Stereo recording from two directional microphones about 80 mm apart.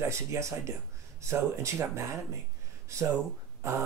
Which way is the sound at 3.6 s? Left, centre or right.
Right.